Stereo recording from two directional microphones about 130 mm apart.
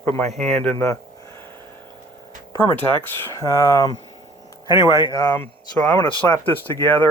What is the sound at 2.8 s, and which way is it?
Speech, 20° left (ahead or behind).